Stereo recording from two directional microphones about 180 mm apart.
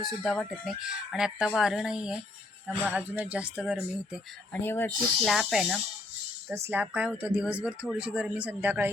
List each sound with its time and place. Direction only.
0.0 s speech: centre (ahead or behind)
4.6 s speech: 10° left (ahead or behind)
5.2 s speech: centre (ahead or behind)
6.5 s speech: 15° right (ahead or behind)